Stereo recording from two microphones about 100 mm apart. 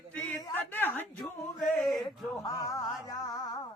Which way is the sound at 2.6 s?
35° left (ahead or behind).